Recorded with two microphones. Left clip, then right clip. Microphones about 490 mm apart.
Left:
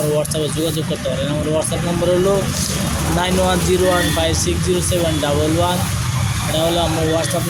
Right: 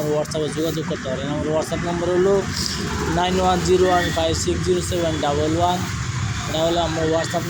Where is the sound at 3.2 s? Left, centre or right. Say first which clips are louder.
Left 1 dB; left.